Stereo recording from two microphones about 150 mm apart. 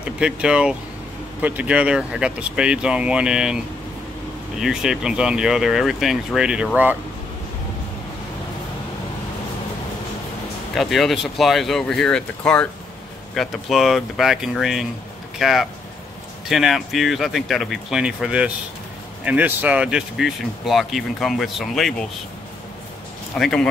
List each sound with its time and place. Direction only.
0.0 s speech: 5° right (ahead or behind)
10.7 s speech: centre (ahead or behind)
23.3 s speech: 5° left (ahead or behind)